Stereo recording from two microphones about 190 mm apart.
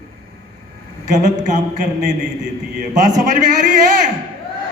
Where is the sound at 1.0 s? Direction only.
40° right (ahead or behind).